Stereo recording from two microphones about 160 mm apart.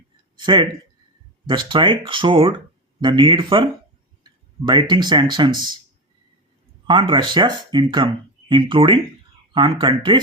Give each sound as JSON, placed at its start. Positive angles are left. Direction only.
{"t": 0.3, "sound": "speech", "side_deg": -30}
{"t": 6.8, "sound": "speech", "side_deg": -30}